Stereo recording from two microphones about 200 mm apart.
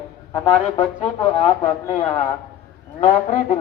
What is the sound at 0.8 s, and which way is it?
Speech, 25° left (ahead or behind).